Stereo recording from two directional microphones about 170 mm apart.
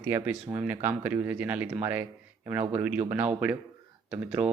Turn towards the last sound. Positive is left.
turn(degrees=-10)  # may be behind; listen again after turning